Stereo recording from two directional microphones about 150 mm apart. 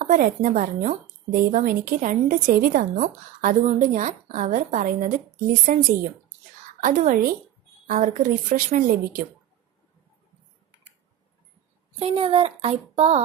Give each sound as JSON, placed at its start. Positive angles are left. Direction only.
{"t": 0.0, "sound": "a woman's voice", "side_deg": -60}
{"t": 6.8, "sound": "a woman's voice", "side_deg": -55}
{"t": 11.9, "sound": "speech", "side_deg": -40}